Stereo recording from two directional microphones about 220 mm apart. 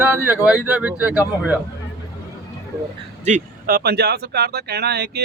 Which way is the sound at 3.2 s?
35° right (ahead or behind).